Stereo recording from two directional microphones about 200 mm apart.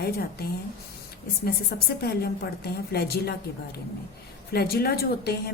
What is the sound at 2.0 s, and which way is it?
A woman's voice, 50° left (ahead or behind).